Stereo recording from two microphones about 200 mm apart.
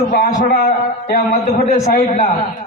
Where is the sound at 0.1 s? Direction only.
45° left (ahead or behind).